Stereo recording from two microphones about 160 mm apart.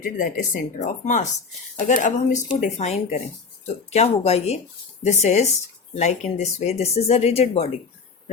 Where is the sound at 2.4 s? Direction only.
40° left (ahead or behind).